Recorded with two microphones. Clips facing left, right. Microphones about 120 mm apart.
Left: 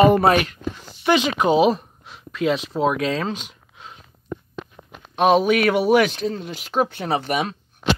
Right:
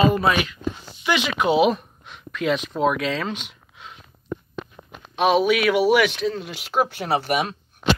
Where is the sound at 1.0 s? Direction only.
35° left (ahead or behind).